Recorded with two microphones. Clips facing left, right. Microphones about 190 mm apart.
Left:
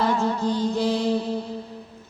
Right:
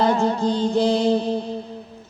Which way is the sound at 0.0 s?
30° right (ahead or behind).